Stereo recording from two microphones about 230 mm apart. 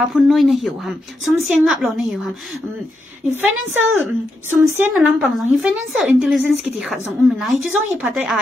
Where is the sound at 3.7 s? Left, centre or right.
Right.